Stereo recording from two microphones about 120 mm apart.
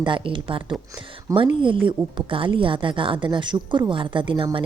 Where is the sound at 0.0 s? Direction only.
45° right (ahead or behind).